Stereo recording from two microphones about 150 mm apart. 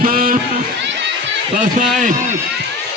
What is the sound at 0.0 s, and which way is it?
Run, 70° right (ahead or behind).